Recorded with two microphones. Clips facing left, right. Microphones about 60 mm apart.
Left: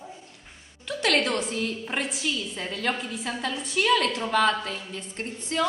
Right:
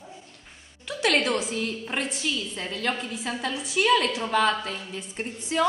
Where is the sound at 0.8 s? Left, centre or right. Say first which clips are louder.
Right 1 dB; centre.